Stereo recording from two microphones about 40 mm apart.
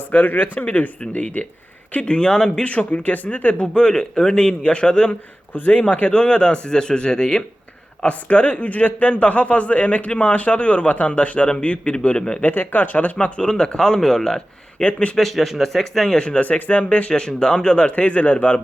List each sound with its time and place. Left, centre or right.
0.3 s a man's voice: left; by 2.6 s centre
2.6 s a man's voice: left
3.8 s speech: centre
8.0 s a man's voice: left
12.4 s speech: left; by 14.4 s centre
14.8 s speech: left
15.1 s a man's voice: centre
16.1 s speech: left
16.6 s a man's voice: left
17.1 s speech: centre